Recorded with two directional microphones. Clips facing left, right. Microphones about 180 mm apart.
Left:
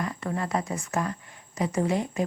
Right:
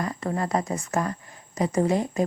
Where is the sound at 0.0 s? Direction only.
35° right (ahead or behind).